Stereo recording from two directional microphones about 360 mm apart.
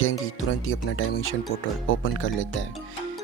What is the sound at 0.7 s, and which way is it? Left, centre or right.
Speech, left.